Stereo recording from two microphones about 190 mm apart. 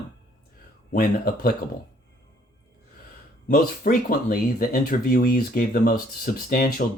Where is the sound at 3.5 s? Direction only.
50° left (ahead or behind).